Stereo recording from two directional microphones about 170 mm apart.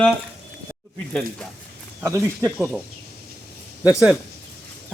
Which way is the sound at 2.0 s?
15° right (ahead or behind).